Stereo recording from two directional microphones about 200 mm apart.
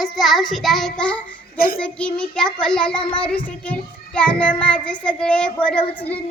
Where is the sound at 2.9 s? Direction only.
25° left (ahead or behind).